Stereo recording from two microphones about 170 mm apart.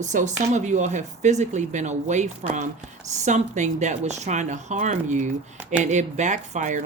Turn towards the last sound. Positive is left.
turn(degrees=-45)  # may be behind; listen again after turning